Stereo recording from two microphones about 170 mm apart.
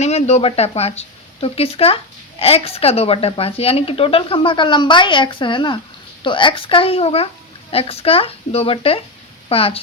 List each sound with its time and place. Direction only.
0.0 s speech: 40° left (ahead or behind)